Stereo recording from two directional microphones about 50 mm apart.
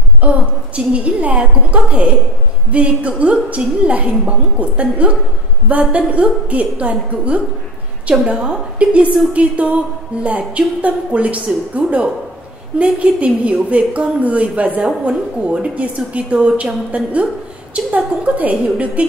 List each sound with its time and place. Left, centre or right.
0.2 s a woman's voice: right